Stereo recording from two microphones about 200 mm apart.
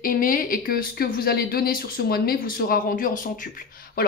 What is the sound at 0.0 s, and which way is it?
Speech, 45° left (ahead or behind).